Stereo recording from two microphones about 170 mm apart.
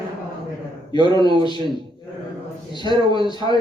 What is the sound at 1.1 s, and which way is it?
Speech, 25° left (ahead or behind).